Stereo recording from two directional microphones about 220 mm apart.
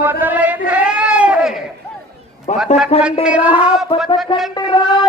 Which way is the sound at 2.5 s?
30° left (ahead or behind).